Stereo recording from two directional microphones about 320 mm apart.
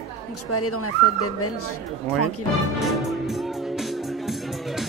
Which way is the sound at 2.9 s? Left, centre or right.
Centre.